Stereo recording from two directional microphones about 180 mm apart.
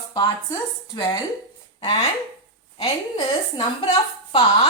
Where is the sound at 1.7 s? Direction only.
30° left (ahead or behind).